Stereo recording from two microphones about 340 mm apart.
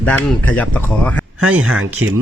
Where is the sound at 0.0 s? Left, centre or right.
Centre.